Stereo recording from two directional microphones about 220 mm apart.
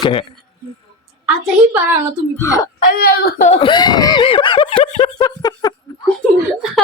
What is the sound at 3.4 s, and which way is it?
Speech, 25° left (ahead or behind).